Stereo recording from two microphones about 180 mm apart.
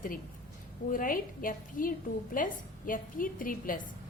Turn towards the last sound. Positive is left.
turn(degrees=50)  # may be behind; listen again after turning